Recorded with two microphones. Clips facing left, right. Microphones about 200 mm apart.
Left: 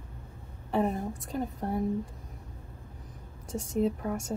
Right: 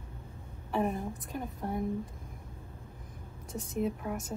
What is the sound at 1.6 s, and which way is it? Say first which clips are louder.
Speech: left 1 dB; 40° left (ahead or behind).